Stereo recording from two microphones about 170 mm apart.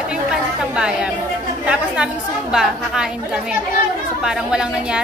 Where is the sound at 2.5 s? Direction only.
5° right (ahead or behind).